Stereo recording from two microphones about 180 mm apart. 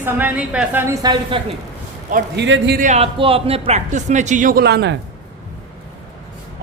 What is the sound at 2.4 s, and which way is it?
Speech, 80° right.